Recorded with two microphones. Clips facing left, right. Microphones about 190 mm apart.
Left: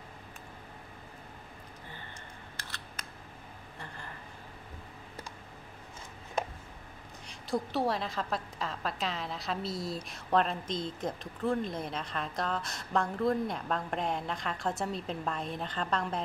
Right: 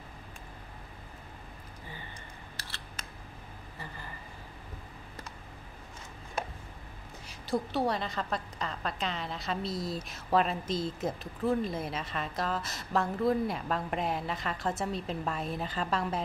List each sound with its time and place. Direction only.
2.5 s scissors: 30° right (ahead or behind)
3.7 s a sound: 5° right (ahead or behind)
7.2 s a woman's voice: centre (ahead or behind)